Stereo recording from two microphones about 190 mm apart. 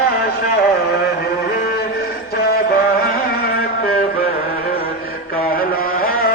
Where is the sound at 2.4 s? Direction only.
50° left (ahead or behind).